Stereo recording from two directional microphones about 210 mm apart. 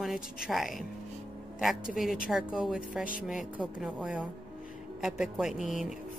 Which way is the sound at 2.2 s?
5° right (ahead or behind).